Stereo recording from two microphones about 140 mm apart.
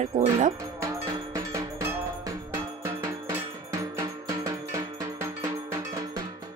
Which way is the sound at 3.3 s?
20° right (ahead or behind).